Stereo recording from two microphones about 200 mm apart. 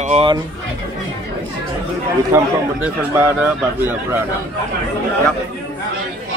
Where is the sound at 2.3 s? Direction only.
10° right (ahead or behind).